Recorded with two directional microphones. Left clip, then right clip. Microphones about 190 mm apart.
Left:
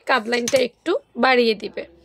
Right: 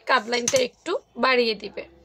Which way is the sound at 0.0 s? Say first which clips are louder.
Left 2 dB; 30° left (ahead or behind).